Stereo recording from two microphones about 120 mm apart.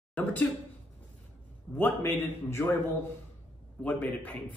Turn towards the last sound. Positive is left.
turn(degrees=10)  # may be behind; listen again after turning